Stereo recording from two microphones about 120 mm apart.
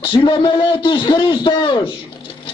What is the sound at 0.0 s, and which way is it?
A man's voice, 40° left (ahead or behind).